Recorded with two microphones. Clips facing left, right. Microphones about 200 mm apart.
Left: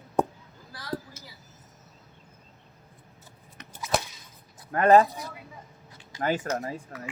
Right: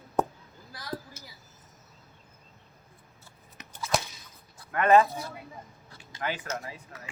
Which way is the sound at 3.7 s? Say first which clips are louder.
Right 1 dB; 20° left (ahead or behind).